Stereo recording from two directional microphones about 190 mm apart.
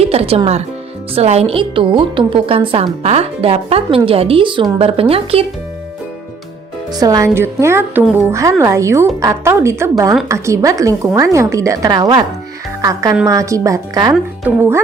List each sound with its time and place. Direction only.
0.0 s a woman's voice: 30° right (ahead or behind)
6.9 s a woman's voice: 20° right (ahead or behind)